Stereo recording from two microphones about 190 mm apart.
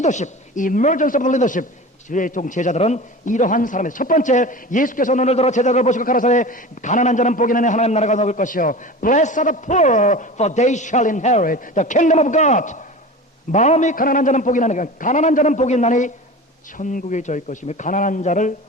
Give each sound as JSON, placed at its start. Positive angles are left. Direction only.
{"t": 0.0, "sound": "a man's voice", "side_deg": 40}